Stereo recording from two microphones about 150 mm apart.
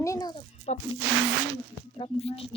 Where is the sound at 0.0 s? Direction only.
25° left (ahead or behind).